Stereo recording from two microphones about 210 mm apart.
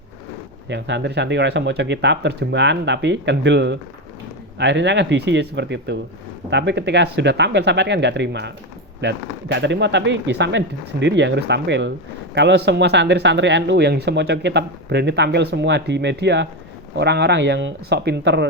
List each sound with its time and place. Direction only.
0.7 s speech: 55° right (ahead or behind)